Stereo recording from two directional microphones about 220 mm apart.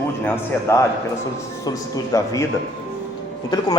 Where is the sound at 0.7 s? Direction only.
15° left (ahead or behind).